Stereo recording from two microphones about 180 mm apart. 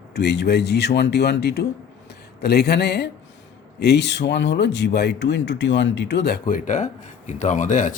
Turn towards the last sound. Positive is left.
turn(degrees=45)  # may be behind; listen again after turning